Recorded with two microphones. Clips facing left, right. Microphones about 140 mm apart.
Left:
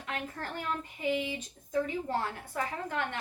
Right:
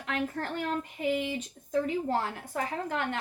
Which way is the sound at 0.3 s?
45° right (ahead or behind).